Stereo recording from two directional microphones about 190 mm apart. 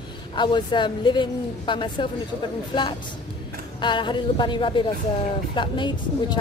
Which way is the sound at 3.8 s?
25° left (ahead or behind).